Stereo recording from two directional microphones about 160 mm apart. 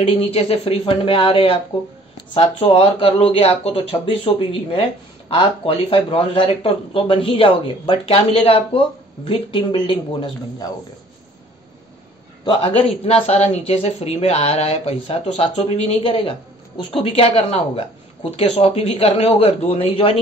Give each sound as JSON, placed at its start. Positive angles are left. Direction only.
{"t": 0.0, "sound": "speech", "side_deg": 40}
{"t": 12.4, "sound": "speech", "side_deg": 35}